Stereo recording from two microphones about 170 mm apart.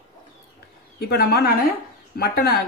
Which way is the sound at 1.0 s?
70° left (ahead or behind).